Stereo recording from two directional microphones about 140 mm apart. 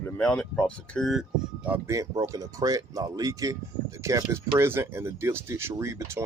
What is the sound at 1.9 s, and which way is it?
Speech, 25° right (ahead or behind).